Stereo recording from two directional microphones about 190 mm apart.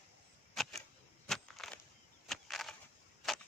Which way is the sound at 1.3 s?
Centre (ahead or behind).